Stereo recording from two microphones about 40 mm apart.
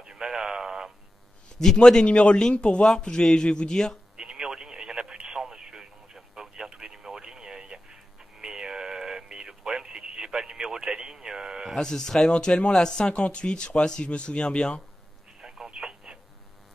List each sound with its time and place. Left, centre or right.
0.0 s a sound: centre
1.8 s speech: centre
4.2 s radio: centre
11.7 s speech: centre
15.4 s telephone: centre